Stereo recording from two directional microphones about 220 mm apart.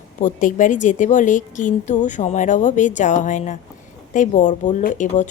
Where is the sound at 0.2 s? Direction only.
35° left (ahead or behind).